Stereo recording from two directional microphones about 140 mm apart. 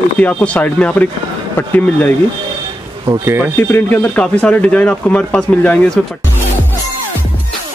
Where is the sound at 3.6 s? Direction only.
15° left (ahead or behind).